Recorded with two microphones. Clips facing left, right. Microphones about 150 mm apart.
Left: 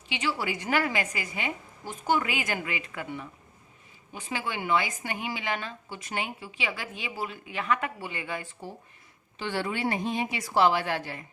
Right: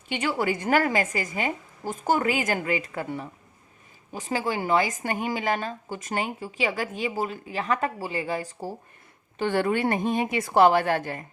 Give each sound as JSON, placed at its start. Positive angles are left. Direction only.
{"t": 0.1, "sound": "a woman's voice", "side_deg": -50}
{"t": 9.4, "sound": "a woman's voice", "side_deg": -50}